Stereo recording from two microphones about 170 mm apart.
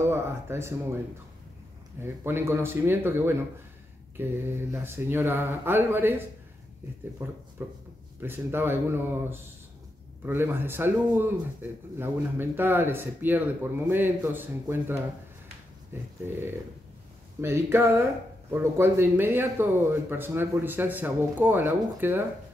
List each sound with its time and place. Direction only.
0.0 s a man's voice: 15° right (ahead or behind)